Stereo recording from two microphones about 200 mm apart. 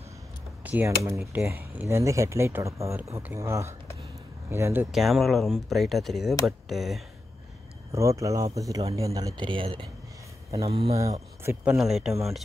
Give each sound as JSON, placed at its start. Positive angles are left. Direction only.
{"t": 0.7, "sound": "speech", "side_deg": -10}
{"t": 4.9, "sound": "speech", "side_deg": 0}
{"t": 7.9, "sound": "speech", "side_deg": -15}
{"t": 11.0, "sound": "speech", "side_deg": -15}
{"t": 11.8, "sound": "speech", "side_deg": 0}